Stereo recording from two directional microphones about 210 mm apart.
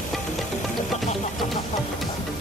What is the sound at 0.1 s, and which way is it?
Music, centre (ahead or behind).